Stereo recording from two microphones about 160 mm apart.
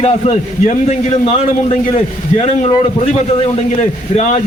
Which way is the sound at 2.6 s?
45° left (ahead or behind).